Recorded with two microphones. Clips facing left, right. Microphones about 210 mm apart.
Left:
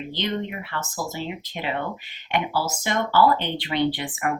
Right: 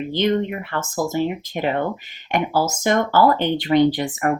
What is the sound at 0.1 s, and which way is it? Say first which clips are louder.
Speech: right 9 dB; 50° right (ahead or behind).